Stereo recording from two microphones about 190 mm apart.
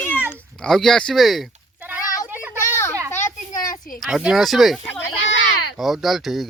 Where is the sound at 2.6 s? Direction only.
15° left (ahead or behind).